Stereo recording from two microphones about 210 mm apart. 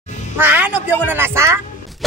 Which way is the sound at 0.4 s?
10° right (ahead or behind).